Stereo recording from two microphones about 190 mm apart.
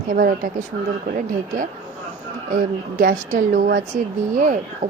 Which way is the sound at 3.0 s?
45° right (ahead or behind).